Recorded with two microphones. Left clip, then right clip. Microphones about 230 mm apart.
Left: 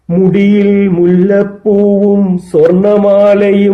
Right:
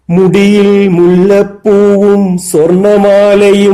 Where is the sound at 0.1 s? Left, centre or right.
Right.